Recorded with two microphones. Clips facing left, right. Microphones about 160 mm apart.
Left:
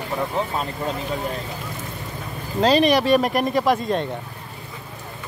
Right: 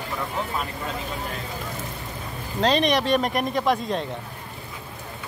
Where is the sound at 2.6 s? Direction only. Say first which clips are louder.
Left 4 dB; 5° left (ahead or behind).